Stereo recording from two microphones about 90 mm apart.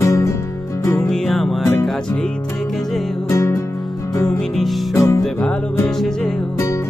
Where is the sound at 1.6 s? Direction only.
25° left (ahead or behind).